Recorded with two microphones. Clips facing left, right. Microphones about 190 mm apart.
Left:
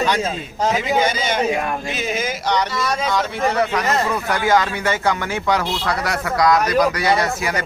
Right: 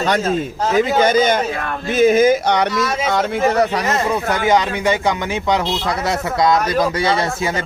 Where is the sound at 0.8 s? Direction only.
45° right (ahead or behind).